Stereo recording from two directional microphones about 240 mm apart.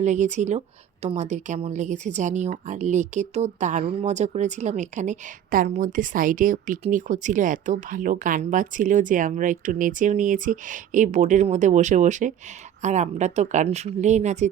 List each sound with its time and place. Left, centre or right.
0.0 s speech: right